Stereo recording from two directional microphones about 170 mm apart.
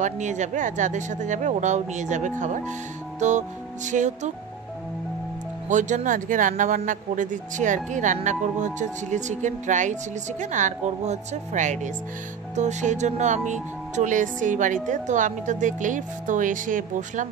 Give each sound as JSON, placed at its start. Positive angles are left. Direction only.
{"t": 0.0, "sound": "speech", "side_deg": -45}
{"t": 5.7, "sound": "speech", "side_deg": -45}